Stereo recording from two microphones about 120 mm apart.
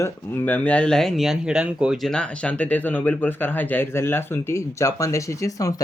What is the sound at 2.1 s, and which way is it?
Speech, 10° left (ahead or behind).